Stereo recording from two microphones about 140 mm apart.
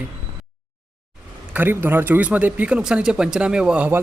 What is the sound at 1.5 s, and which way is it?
Speech, 15° right (ahead or behind).